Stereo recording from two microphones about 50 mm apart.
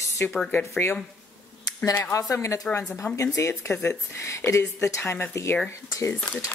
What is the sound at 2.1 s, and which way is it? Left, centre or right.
Speech, left.